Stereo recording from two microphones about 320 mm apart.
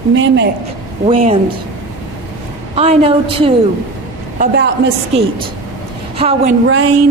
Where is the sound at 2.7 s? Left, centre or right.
Centre.